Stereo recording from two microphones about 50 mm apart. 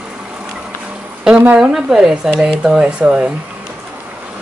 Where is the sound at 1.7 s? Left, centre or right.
Centre.